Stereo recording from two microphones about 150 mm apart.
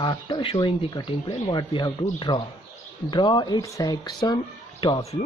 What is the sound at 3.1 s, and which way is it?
Speech, 30° left (ahead or behind).